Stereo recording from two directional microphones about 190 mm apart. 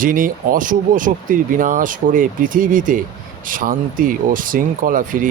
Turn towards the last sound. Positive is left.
turn(degrees=-45)  # may be behind; listen again after turning